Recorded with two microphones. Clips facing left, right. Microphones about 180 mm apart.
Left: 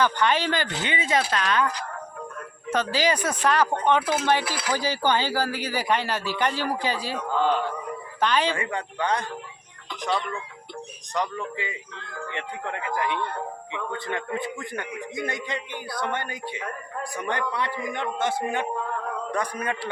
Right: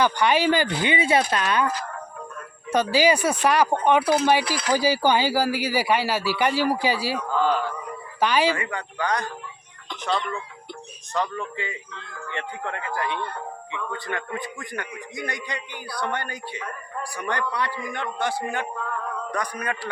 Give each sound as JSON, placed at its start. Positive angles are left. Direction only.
{"t": 0.0, "sound": "speech", "side_deg": -10}
{"t": 2.6, "sound": "speech", "side_deg": -10}
{"t": 7.3, "sound": "a man's voice", "side_deg": 20}
{"t": 8.2, "sound": "speech", "side_deg": -10}
{"t": 8.5, "sound": "a man's voice", "side_deg": 30}
{"t": 11.1, "sound": "a man's voice", "side_deg": 15}